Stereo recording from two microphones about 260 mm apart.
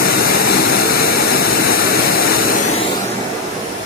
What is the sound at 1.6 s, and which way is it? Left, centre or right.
Jet engine, left.